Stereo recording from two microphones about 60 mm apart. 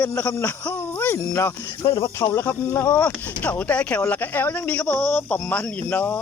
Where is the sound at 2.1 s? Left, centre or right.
Left.